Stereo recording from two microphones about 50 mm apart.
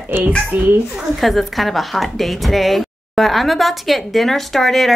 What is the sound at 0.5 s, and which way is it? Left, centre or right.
Speech, right.